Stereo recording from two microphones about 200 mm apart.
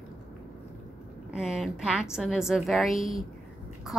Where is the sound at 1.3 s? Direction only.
Centre (ahead or behind).